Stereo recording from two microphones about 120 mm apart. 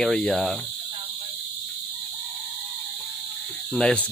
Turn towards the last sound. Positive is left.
turn(degrees=10)  # may be behind; listen again after turning